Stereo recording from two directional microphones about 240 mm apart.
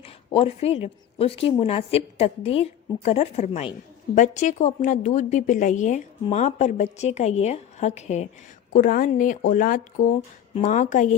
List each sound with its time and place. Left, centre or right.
0.0 s a woman's voice: left